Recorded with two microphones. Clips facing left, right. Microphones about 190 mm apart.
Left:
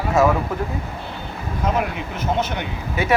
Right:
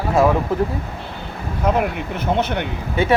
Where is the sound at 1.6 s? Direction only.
55° right (ahead or behind).